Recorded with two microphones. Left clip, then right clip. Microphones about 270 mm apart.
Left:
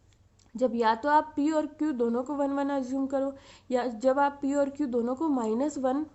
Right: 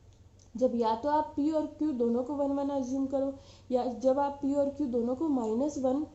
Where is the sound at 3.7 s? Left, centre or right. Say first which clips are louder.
Left 2 dB; left.